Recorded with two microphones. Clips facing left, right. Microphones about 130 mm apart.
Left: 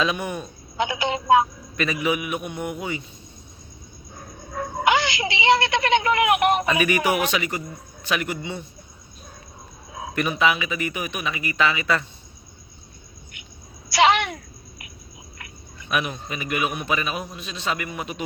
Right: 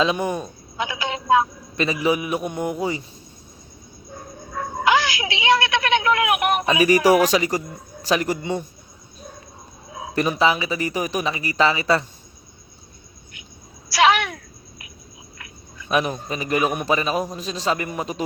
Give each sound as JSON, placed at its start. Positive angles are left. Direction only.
{"t": 0.0, "sound": "speech", "side_deg": -30}
{"t": 0.8, "sound": "a woman's voice", "side_deg": 25}
{"t": 1.7, "sound": "speech", "side_deg": -30}
{"t": 4.8, "sound": "a sound", "side_deg": 25}
{"t": 6.7, "sound": "speech", "side_deg": -35}
{"t": 10.2, "sound": "speech", "side_deg": -30}
{"t": 13.9, "sound": "a sound", "side_deg": 25}
{"t": 15.9, "sound": "speech", "side_deg": -35}